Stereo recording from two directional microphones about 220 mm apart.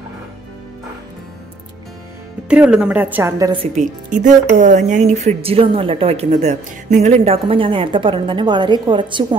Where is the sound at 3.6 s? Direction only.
35° right (ahead or behind).